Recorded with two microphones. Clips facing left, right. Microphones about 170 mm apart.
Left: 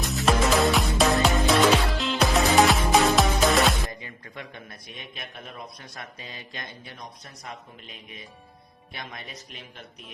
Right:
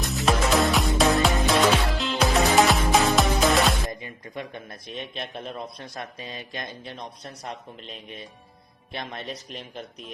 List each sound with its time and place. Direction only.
0.0 s music: centre (ahead or behind)
4.0 s a sound: 20° right (ahead or behind)
5.1 s speech: 30° right (ahead or behind)
9.0 s speech: 30° right (ahead or behind)
9.5 s speech: centre (ahead or behind)